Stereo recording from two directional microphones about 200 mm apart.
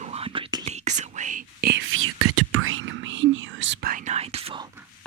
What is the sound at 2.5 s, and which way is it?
Whispering, 90° right.